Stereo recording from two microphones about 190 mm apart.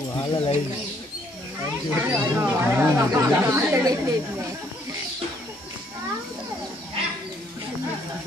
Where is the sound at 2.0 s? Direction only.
10° right (ahead or behind).